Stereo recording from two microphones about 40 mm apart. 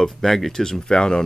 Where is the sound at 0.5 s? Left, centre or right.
Centre.